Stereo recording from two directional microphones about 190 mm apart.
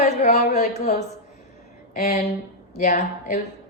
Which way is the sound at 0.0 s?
35° left (ahead or behind).